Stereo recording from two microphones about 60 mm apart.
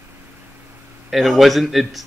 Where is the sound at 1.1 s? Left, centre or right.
Centre.